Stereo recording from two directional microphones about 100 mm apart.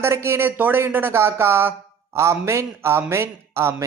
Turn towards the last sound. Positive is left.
turn(degrees=-25)  # may be behind; listen again after turning